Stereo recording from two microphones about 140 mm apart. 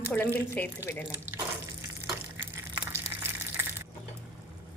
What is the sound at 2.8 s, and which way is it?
Water, 15° right (ahead or behind).